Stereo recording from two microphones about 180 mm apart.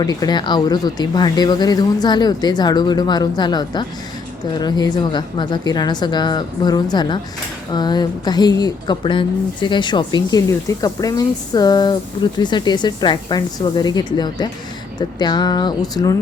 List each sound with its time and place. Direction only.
0.0 s speech: 20° left (ahead or behind)